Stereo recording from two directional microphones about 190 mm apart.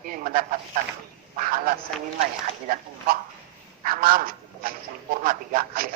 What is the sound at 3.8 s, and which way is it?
A man's voice, 50° right (ahead or behind).